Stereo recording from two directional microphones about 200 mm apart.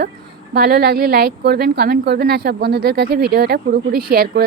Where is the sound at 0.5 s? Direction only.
50° right (ahead or behind).